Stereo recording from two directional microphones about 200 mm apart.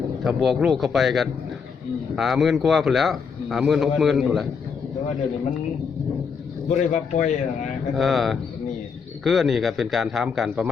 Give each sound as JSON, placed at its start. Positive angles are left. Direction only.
{"t": 0.3, "sound": "a man's voice", "side_deg": 0}
{"t": 6.7, "sound": "speech", "side_deg": 35}
{"t": 7.9, "sound": "a man's voice", "side_deg": 0}